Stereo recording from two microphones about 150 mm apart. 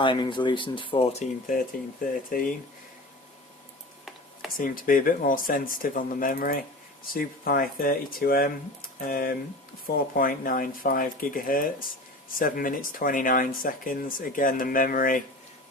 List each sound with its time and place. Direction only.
0.0 s speech: 30° left (ahead or behind); by 2.2 s 65° left (ahead or behind)
4.5 s speech: 70° left (ahead or behind)